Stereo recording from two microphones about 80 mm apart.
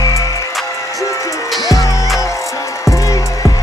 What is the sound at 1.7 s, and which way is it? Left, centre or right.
Music, left.